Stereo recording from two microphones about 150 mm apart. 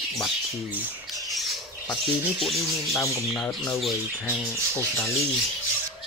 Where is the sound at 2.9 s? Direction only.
20° left (ahead or behind).